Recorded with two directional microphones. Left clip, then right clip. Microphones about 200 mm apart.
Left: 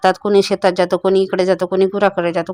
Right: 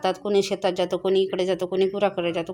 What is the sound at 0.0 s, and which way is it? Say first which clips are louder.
Speech: left 9 dB; 30° left (ahead or behind).